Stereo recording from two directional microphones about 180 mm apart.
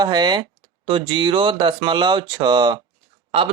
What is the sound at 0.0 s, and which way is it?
Speech, 25° right (ahead or behind).